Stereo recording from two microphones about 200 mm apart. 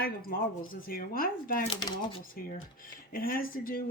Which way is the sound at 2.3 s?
45° left (ahead or behind).